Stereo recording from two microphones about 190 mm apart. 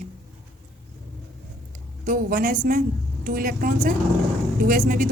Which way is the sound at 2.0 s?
50° right (ahead or behind).